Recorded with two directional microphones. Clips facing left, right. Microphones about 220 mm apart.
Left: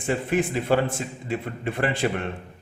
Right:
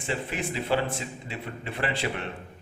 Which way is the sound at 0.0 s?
50° left (ahead or behind).